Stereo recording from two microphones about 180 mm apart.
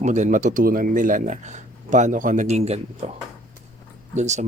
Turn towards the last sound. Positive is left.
turn(degrees=-40)  # may be behind; listen again after turning